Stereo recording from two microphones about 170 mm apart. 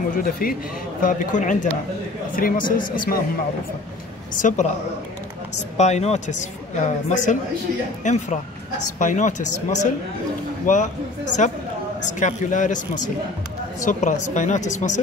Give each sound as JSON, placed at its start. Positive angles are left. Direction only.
{"t": 0.1, "sound": "speech", "side_deg": 60}
{"t": 4.4, "sound": "speech", "side_deg": 45}
{"t": 5.8, "sound": "speech", "side_deg": 40}